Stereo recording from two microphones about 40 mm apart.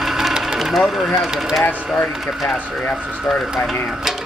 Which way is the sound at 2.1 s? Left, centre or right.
Centre.